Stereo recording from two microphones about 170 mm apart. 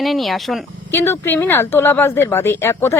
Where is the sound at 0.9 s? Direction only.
15° left (ahead or behind).